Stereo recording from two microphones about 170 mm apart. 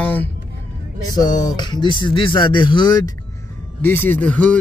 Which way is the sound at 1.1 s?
20° left (ahead or behind).